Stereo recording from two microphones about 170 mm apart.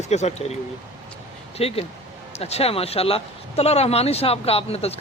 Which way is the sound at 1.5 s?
35° left (ahead or behind).